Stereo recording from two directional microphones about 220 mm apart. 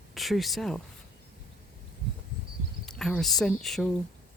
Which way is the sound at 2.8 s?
Centre (ahead or behind).